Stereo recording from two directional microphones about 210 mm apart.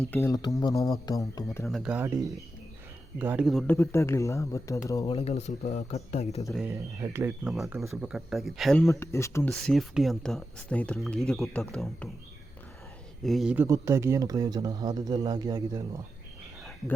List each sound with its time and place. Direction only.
0.1 s speech: 15° left (ahead or behind)
1.6 s speech: centre (ahead or behind)
3.8 s speech: 15° left (ahead or behind)
5.1 s speech: 30° left (ahead or behind)
6.5 s speech: centre (ahead or behind)
6.7 s speech: 15° right (ahead or behind)
8.9 s speech: 15° left (ahead or behind)
9.5 s speech: centre (ahead or behind)
13.2 s speech: centre (ahead or behind); by 16.0 s 15° right (ahead or behind)